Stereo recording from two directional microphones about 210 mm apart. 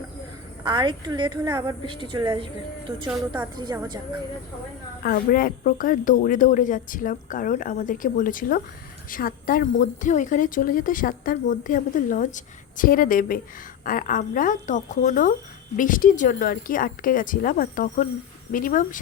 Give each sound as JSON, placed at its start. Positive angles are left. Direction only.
{"t": 0.6, "sound": "a woman's voice", "side_deg": -20}
{"t": 5.0, "sound": "a woman's voice", "side_deg": 45}